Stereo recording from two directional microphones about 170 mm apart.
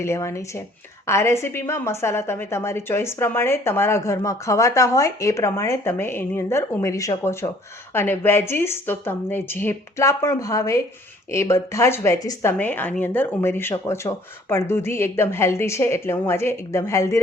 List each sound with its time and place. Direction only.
0.0 s a woman's voice: 15° left (ahead or behind)